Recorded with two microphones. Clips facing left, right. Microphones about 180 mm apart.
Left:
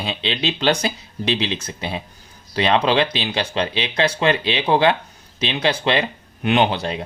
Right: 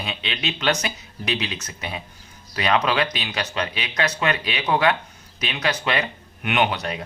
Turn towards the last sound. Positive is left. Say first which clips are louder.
# left 4 dB
turn(degrees=30)  # may be behind; listen again after turning